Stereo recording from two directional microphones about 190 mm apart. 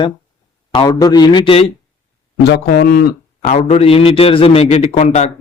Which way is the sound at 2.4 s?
55° left (ahead or behind).